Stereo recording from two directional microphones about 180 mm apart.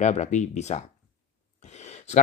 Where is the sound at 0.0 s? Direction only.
40° left (ahead or behind).